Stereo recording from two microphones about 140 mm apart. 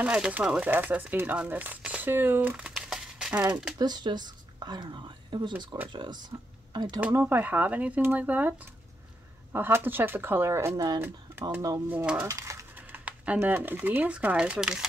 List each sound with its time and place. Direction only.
0.0 s speech: 10° right (ahead or behind)
3.7 s speech: 30° right (ahead or behind)
7.0 s speech: 15° right (ahead or behind)
11.9 s speech: 15° right (ahead or behind)